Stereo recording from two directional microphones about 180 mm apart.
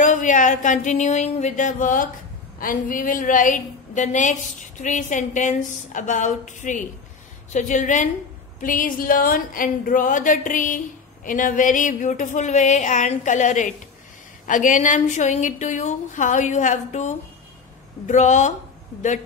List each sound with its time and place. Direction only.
0.0 s a woman's voice: 45° left (ahead or behind)